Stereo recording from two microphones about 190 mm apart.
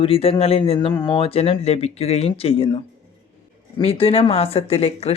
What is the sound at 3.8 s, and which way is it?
Speech, 30° left (ahead or behind).